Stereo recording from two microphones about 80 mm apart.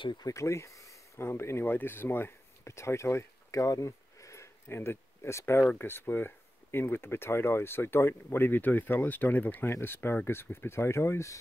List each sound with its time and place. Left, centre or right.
0.2 s speech: left